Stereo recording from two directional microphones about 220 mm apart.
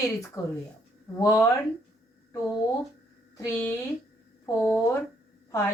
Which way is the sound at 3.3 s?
15° left (ahead or behind).